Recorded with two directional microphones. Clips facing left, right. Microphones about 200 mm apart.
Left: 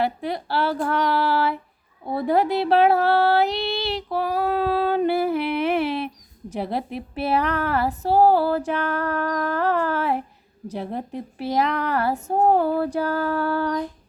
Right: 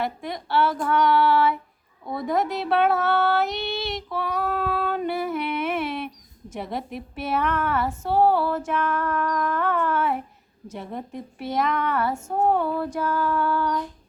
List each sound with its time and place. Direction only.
0.0 s child singing: 35° left (ahead or behind)